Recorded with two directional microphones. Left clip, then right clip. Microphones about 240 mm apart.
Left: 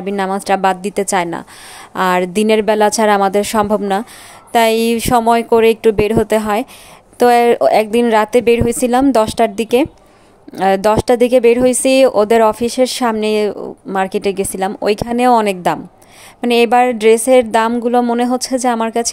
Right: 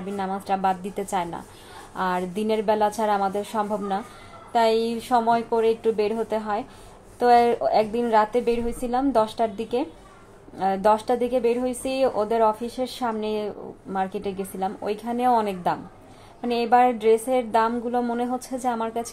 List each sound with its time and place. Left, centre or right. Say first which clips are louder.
0.0 s speech: left 11 dB; left